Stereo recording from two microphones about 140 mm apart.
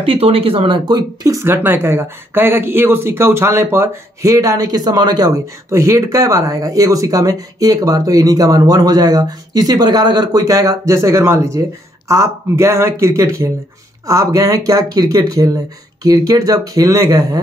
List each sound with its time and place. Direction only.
0.0 s speech: 40° right (ahead or behind); by 17.4 s 20° right (ahead or behind)